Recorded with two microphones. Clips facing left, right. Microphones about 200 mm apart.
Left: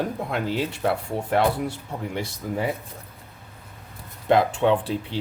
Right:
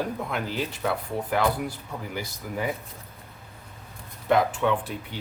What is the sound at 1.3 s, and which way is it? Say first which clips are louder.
Speech: left 4 dB; 25° left (ahead or behind).